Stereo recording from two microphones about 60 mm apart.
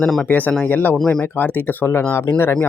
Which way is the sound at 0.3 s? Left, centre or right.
Left.